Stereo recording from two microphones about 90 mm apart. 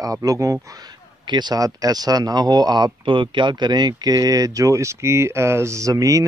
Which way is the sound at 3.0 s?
70° right (ahead or behind).